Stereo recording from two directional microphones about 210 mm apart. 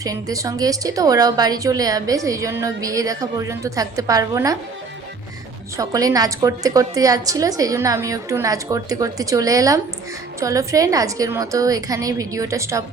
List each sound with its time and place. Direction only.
0.0 s speech: 15° right (ahead or behind)
5.7 s speech: 15° right (ahead or behind)